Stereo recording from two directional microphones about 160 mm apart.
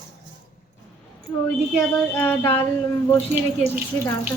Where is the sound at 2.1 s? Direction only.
10° left (ahead or behind).